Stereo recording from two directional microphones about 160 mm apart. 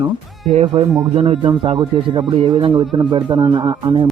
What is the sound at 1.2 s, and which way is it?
Speech, 30° right (ahead or behind).